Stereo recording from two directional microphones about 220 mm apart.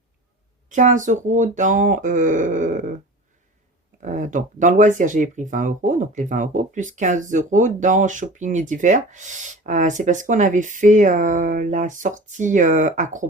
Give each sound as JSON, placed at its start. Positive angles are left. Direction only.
{"t": 0.7, "sound": "speech", "side_deg": -35}
{"t": 4.0, "sound": "speech", "side_deg": -35}